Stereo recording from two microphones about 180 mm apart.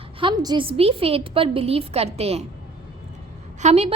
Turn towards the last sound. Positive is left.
turn(degrees=-35)  # may be behind; listen again after turning